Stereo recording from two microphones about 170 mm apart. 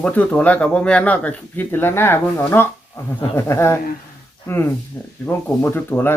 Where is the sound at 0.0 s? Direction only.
10° left (ahead or behind).